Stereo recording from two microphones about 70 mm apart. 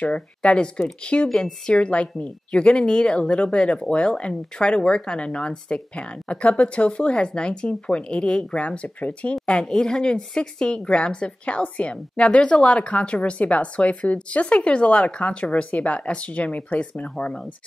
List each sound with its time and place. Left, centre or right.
0.0 s a woman's voice: centre
17.1 s a woman's voice: centre